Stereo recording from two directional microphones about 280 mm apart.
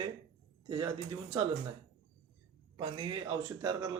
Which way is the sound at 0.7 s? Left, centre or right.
Centre.